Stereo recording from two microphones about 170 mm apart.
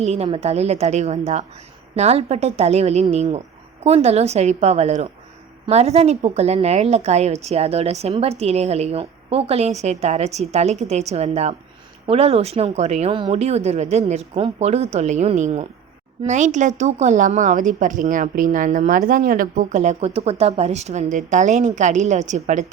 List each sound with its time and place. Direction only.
0.0 s a woman's voice: 40° right (ahead or behind)